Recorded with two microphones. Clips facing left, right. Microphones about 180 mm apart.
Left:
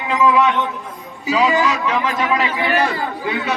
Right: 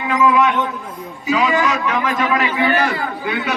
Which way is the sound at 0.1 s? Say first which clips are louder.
Even; 20° left (ahead or behind).